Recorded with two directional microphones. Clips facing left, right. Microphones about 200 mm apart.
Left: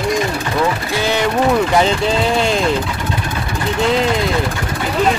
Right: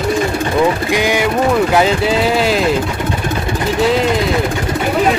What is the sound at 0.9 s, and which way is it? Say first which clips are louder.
Speech: right 2 dB; 15° right (ahead or behind).